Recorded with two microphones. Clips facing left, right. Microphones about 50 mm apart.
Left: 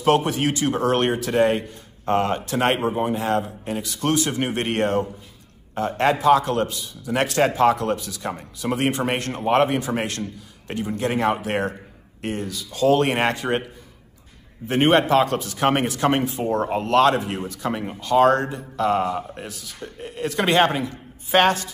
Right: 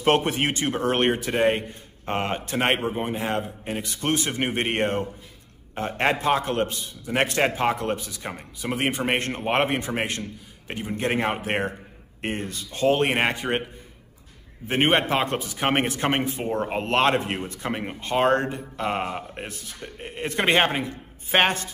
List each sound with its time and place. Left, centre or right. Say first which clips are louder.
0.0 s speech: left 2 dB; right
7.1 s speech: left 2 dB; right
9.1 s speech: left 3 dB; right
13.0 s speech: left 2 dB; centre
14.7 s speech: left 4 dB; right